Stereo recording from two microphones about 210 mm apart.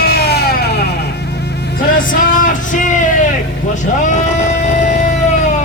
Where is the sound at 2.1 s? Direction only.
40° left (ahead or behind).